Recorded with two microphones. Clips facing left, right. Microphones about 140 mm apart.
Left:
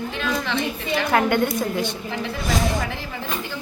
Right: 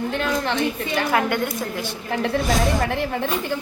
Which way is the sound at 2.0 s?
50° right (ahead or behind).